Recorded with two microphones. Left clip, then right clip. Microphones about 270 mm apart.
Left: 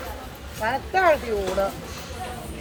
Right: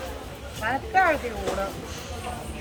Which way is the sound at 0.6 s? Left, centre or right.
Left.